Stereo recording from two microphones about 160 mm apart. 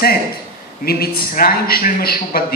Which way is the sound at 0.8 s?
70° left (ahead or behind).